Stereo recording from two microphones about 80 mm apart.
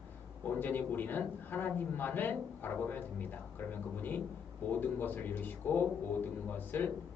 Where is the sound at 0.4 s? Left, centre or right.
Left.